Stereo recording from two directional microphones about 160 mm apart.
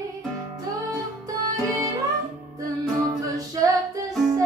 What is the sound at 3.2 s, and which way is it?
Music, 20° right (ahead or behind).